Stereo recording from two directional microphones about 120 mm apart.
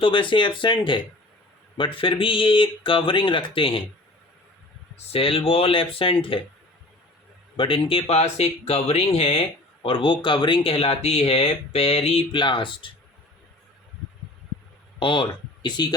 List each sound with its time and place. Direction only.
0.0 s speech: 45° left (ahead or behind)
5.1 s speech: 50° left (ahead or behind)
7.5 s speech: 45° left (ahead or behind)
14.9 s speech: 40° left (ahead or behind)